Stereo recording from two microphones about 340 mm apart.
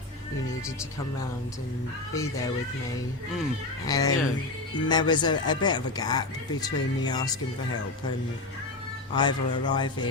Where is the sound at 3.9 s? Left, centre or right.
Centre.